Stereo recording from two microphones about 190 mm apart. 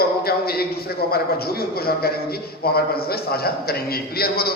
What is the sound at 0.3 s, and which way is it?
A man's voice, 55° left (ahead or behind).